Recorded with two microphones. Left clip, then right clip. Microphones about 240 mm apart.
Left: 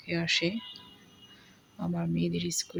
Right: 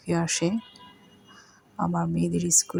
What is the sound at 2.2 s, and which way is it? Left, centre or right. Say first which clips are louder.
Speech: right 8 dB; centre.